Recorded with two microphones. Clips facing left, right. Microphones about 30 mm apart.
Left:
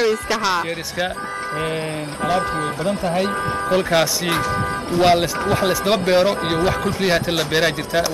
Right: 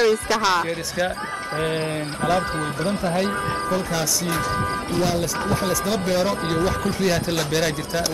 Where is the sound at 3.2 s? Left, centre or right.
Left.